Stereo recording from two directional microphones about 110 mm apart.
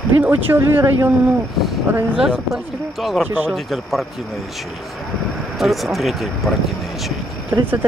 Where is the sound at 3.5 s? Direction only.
Centre (ahead or behind).